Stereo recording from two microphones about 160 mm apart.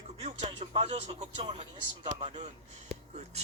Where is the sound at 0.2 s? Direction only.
40° right (ahead or behind).